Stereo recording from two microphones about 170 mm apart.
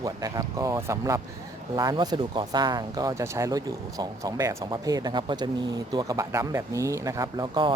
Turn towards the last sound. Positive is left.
turn(degrees=-25)  # may be behind; listen again after turning